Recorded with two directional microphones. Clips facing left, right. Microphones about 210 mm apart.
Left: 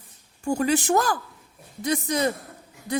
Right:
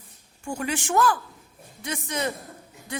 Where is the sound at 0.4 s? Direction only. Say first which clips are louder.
Left 7 dB; 40° left (ahead or behind).